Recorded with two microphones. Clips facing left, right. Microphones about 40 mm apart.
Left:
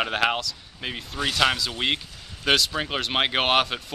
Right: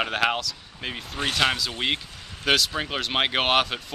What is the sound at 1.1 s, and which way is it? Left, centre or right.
Speech, right.